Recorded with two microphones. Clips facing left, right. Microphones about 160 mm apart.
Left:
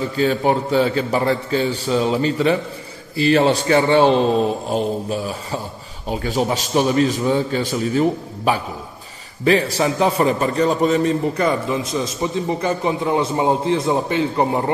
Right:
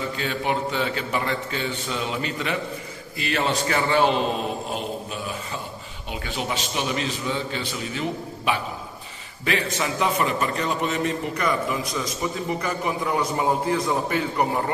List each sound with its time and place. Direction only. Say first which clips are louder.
0.2 s a man's voice: left 10 dB; 35° left (ahead or behind)